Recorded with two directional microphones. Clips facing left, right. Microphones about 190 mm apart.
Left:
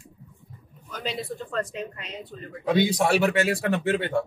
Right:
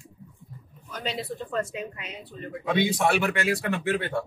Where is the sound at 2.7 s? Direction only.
40° left (ahead or behind).